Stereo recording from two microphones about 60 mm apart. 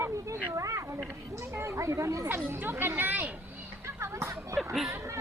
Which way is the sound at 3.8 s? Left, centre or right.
Right.